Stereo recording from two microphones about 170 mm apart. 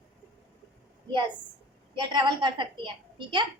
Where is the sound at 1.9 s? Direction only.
25° right (ahead or behind).